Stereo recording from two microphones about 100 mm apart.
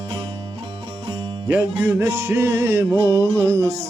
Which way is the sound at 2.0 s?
25° right (ahead or behind).